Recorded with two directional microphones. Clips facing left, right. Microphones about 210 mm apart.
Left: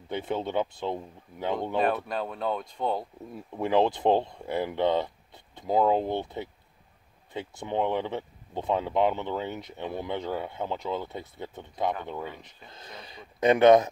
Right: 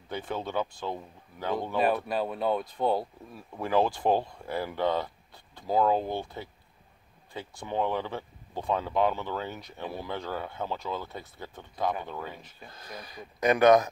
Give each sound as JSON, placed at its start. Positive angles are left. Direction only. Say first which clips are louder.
{"t": 0.1, "sound": "speech", "louder": "left 3 dB", "side_deg": 20}
{"t": 2.0, "sound": "speech", "louder": "right 2 dB", "side_deg": -5}
{"t": 3.3, "sound": "speech", "louder": "left 2 dB", "side_deg": 20}